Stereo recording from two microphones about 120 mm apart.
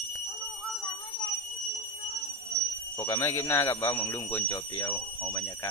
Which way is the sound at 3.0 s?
25° left (ahead or behind).